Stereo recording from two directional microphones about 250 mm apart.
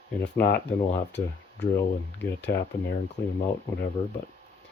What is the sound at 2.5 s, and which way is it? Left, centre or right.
Speech, left.